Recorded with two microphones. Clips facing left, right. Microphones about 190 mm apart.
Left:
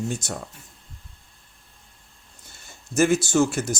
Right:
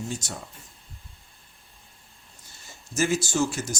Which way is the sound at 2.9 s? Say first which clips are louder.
Left 5 dB; 55° left (ahead or behind).